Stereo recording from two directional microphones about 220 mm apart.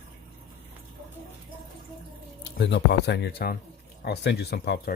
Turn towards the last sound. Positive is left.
turn(degrees=45)  # may be behind; listen again after turning